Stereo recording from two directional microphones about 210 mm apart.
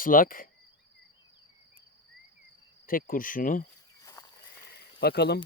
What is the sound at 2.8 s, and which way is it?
Speech, 40° left (ahead or behind).